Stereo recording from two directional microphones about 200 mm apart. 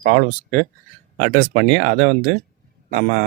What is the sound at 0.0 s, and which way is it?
Speech, 40° right (ahead or behind).